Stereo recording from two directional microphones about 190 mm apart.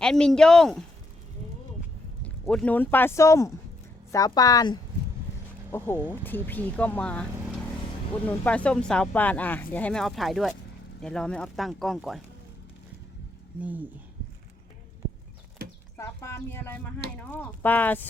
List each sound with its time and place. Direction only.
0.0 s speech: 5° left (ahead or behind)
2.2 s a woman's voice: 5° left (ahead or behind)
8.3 s speech: 5° left (ahead or behind)
13.6 s speech: 10° right (ahead or behind)
16.0 s speech: 15° left (ahead or behind)